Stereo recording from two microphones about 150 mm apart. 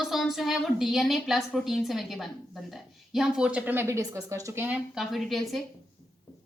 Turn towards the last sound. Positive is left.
turn(degrees=0)  # may be behind; listen again after turning